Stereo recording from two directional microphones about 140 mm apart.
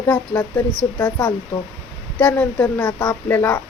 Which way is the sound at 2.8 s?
25° left (ahead or behind).